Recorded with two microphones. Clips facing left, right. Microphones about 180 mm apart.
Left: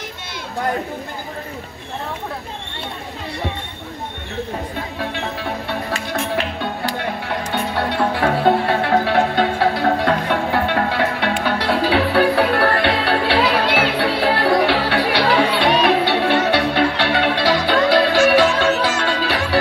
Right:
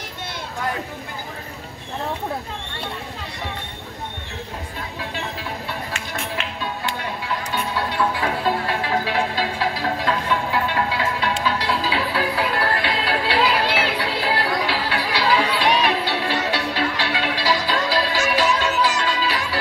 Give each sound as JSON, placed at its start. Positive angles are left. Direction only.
{"t": 4.9, "sound": "music", "side_deg": 65}
{"t": 7.0, "sound": "music", "side_deg": 60}